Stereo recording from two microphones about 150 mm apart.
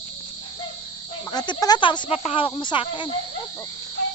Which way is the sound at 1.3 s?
25° left (ahead or behind).